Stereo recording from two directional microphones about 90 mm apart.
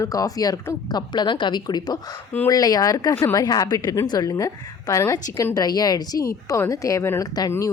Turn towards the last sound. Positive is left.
turn(degrees=45)  # may be behind; listen again after turning